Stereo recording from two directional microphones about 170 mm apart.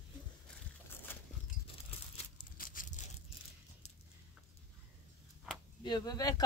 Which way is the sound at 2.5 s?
55° left (ahead or behind).